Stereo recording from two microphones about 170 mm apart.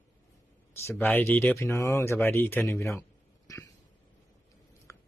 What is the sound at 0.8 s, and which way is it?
Speech, 15° left (ahead or behind).